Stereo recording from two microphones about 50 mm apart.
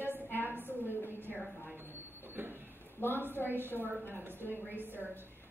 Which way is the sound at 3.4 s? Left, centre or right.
Right.